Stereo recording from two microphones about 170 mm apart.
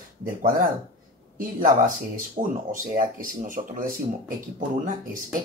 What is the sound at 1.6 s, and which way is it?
Speech, 55° right (ahead or behind).